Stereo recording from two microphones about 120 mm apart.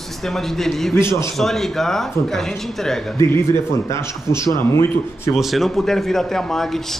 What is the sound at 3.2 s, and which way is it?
Speech, 20° left (ahead or behind).